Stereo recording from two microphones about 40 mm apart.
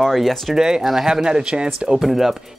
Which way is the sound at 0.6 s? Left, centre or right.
Centre.